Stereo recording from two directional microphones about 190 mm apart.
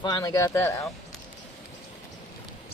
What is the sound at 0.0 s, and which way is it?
Speech, 20° left (ahead or behind).